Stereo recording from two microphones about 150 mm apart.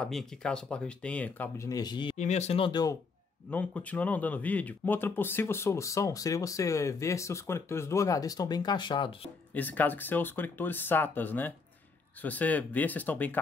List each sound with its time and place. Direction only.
0.0 s speech: 5° left (ahead or behind)
1.7 s speech: 25° left (ahead or behind)
2.1 s speech: 50° left (ahead or behind); by 3.0 s 25° left (ahead or behind)
3.4 s speech: 10° left (ahead or behind); by 9.3 s 35° left (ahead or behind)
9.5 s speech: 10° left (ahead or behind)